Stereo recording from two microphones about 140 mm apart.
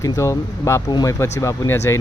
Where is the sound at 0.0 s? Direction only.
25° left (ahead or behind).